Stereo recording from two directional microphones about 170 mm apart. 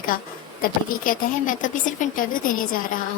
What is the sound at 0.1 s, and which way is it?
A woman's voice, 55° left (ahead or behind).